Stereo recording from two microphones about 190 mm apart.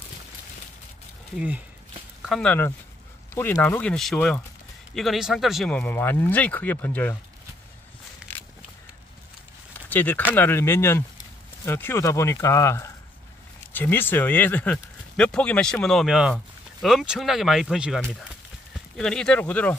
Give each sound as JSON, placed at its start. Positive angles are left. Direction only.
{"t": 2.2, "sound": "speech", "side_deg": 5}
{"t": 8.2, "sound": "walk", "side_deg": -5}
{"t": 9.8, "sound": "speech", "side_deg": 10}